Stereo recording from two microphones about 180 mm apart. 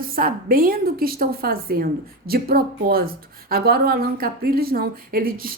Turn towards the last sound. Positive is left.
turn(degrees=-55)  # may be behind; listen again after turning